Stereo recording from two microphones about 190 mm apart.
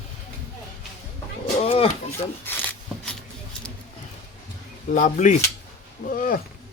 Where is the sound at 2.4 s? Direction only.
5° left (ahead or behind).